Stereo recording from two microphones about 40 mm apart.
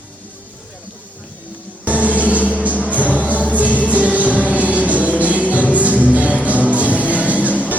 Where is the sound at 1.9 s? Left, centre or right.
Right.